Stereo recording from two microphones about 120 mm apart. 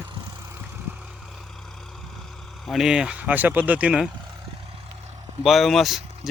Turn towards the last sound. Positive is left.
turn(degrees=0)  # may be behind; listen again after turning